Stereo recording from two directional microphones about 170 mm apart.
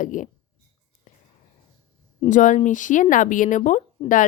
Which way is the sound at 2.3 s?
50° left (ahead or behind).